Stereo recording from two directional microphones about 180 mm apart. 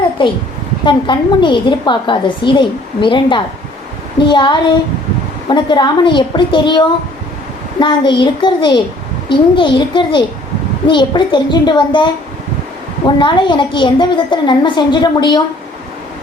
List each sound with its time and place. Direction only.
0.2 s a woman's voice: 25° left (ahead or behind)
13.1 s a woman's voice: 25° left (ahead or behind)